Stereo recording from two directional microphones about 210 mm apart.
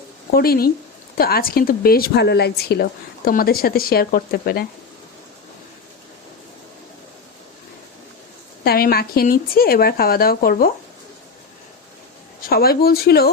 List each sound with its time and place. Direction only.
0.3 s speech: 45° left (ahead or behind)
8.6 s speech: 45° left (ahead or behind)
12.5 s speech: 45° left (ahead or behind)